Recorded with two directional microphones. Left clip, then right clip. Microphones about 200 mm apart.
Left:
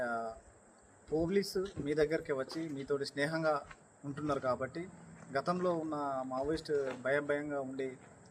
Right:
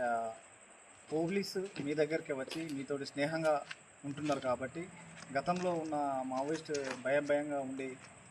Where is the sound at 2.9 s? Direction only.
10° left (ahead or behind).